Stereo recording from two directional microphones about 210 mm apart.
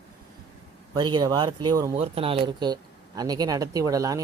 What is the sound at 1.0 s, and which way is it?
Speech, 20° right (ahead or behind).